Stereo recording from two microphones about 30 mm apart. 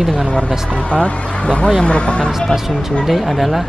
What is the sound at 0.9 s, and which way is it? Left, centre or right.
Speech, left.